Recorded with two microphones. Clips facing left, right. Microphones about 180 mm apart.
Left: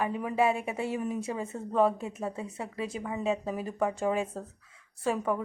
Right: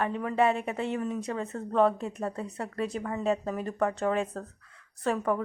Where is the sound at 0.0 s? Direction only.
10° left (ahead or behind).